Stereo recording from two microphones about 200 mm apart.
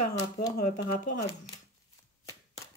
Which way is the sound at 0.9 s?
40° left (ahead or behind).